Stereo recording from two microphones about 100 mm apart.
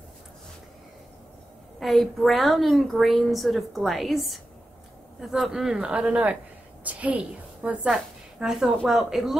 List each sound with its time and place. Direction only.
1.8 s a woman's voice: centre (ahead or behind)